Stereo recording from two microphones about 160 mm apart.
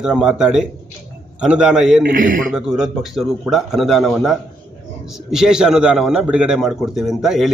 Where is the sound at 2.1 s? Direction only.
60° right (ahead or behind).